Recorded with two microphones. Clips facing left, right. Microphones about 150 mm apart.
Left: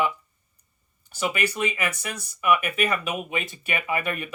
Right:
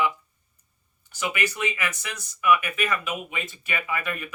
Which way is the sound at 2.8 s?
35° left (ahead or behind).